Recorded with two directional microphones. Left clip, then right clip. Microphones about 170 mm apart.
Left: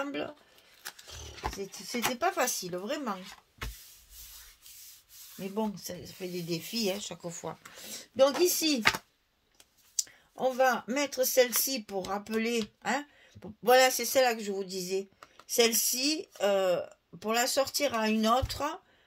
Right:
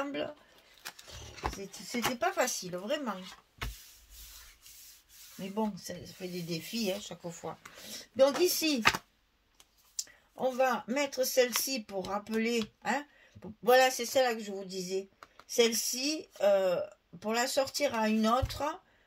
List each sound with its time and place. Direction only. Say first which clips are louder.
0.0 s a sound: even; 45° left (ahead or behind)
0.8 s roaring cats: left 2 dB; 10° left (ahead or behind)
1.9 s speech: left 1 dB; 15° left (ahead or behind)
2.1 s speech: left 1 dB; 45° left (ahead or behind)
3.2 s a sound: even; 10° left (ahead or behind)
5.5 s speech: left 1 dB; 50° left (ahead or behind)
9.9 s speech: left 4 dB; 55° left (ahead or behind)